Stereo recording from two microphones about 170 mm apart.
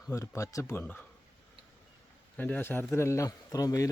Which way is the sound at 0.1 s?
15° left (ahead or behind).